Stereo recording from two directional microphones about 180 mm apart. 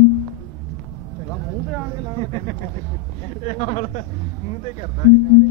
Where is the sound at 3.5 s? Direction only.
40° left (ahead or behind).